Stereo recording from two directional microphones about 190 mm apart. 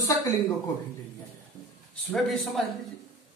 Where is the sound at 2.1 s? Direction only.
Centre (ahead or behind).